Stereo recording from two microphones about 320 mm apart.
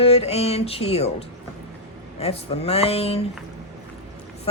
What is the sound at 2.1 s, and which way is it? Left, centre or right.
Speech, centre.